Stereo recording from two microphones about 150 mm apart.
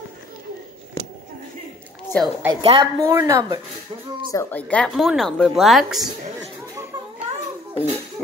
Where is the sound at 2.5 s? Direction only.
35° right (ahead or behind).